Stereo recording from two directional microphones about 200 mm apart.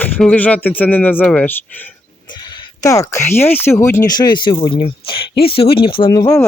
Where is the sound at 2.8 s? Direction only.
15° left (ahead or behind).